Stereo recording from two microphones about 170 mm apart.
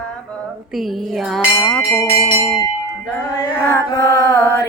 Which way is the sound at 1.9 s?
20° left (ahead or behind).